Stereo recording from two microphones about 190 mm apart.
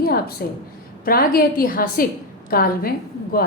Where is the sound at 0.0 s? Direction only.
55° left (ahead or behind).